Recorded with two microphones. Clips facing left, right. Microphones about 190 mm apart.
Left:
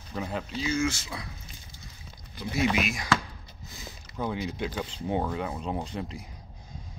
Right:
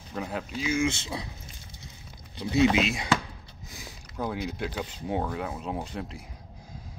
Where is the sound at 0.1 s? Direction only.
Centre (ahead or behind); by 1.3 s 25° right (ahead or behind).